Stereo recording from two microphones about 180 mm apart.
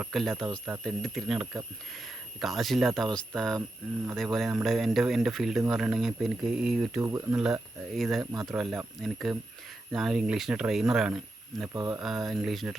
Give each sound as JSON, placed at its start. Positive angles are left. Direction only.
{"t": 0.0, "sound": "speech", "side_deg": 0}
{"t": 7.0, "sound": "speech", "side_deg": -15}
{"t": 7.3, "sound": "speech", "side_deg": -5}
{"t": 11.7, "sound": "speech", "side_deg": -25}
{"t": 11.9, "sound": "speech", "side_deg": 0}